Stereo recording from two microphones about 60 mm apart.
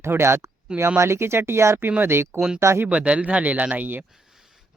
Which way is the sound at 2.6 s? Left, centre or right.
Right.